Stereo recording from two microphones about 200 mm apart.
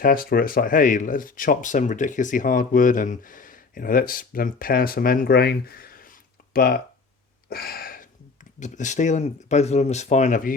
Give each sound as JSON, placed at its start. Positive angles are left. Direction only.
{"t": 0.0, "sound": "speech", "side_deg": 45}
{"t": 7.5, "sound": "a sound", "side_deg": 50}
{"t": 8.5, "sound": "speech", "side_deg": 35}